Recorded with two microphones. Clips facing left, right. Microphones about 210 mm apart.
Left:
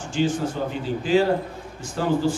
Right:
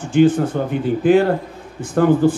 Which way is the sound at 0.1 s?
55° right (ahead or behind).